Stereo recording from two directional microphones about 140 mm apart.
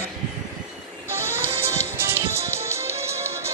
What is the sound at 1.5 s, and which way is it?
Music, 20° right (ahead or behind).